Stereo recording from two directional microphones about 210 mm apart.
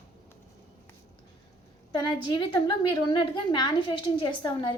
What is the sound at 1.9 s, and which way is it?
A woman's voice, 20° left (ahead or behind).